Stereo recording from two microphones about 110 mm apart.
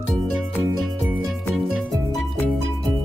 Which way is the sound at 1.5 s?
Centre (ahead or behind).